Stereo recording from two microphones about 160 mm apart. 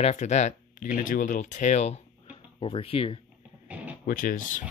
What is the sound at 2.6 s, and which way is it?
Speech, 35° left (ahead or behind).